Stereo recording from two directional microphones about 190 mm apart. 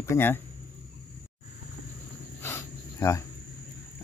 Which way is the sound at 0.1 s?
10° left (ahead or behind).